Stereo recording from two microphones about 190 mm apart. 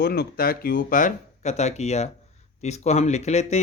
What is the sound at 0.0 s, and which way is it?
A man's voice, 55° left (ahead or behind).